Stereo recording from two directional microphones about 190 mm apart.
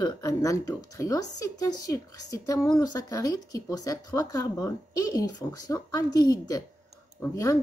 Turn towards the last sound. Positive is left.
turn(degrees=15)  # may be behind; listen again after turning